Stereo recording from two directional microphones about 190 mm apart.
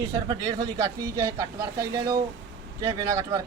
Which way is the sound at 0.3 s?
20° right (ahead or behind).